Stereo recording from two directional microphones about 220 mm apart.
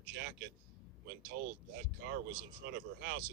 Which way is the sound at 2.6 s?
45° right (ahead or behind).